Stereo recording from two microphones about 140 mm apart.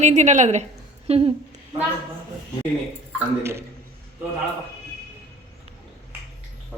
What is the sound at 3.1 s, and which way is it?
Speech, 20° right (ahead or behind).